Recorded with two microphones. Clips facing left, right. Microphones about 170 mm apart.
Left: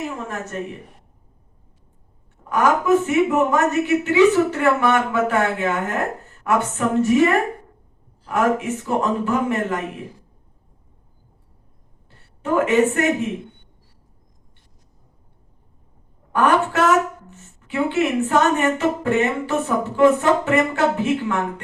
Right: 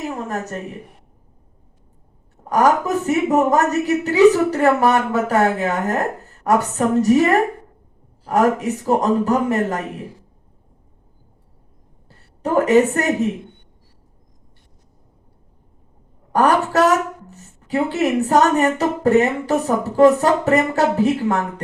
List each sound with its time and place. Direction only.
0.3 s a woman's voice: 40° right (ahead or behind)
2.5 s a woman's voice: 40° right (ahead or behind)
12.0 s a woman's voice: 35° right (ahead or behind)
16.3 s a woman's voice: 40° right (ahead or behind)